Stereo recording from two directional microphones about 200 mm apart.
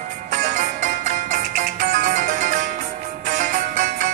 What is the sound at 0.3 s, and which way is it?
Music, 40° right (ahead or behind).